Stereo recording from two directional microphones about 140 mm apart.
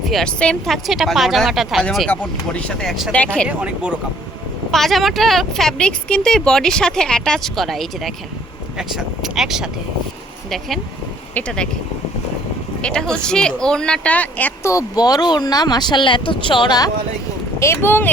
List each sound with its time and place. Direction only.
0.1 s speech: 5° left (ahead or behind)
4.7 s speech: centre (ahead or behind)
11.3 s speech: 5° left (ahead or behind)
12.8 s speech: 5° left (ahead or behind); by 16.9 s 30° left (ahead or behind)
17.6 s speech: 15° left (ahead or behind)